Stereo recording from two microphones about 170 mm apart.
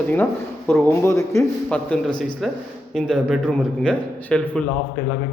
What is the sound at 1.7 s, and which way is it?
A man's voice, 5° left (ahead or behind).